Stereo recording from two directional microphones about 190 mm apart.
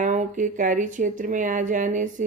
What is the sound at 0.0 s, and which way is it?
A woman's voice, 40° right (ahead or behind).